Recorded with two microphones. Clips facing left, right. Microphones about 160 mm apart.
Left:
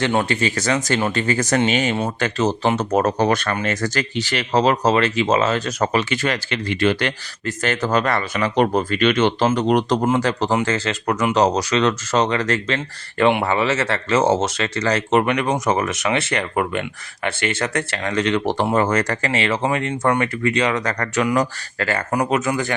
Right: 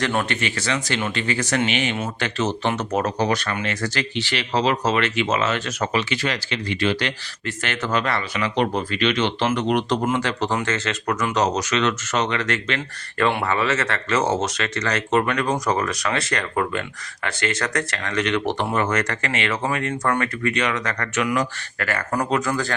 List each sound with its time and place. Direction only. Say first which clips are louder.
0.0 s speech: left 4 dB; 25° left (ahead or behind); by 9.5 s 50° left (ahead or behind)
9.5 s speech: left 3 dB; 35° left (ahead or behind)
15.2 s speech: left 2 dB; 20° left (ahead or behind)
22.1 s speech: left 2 dB; 15° left (ahead or behind)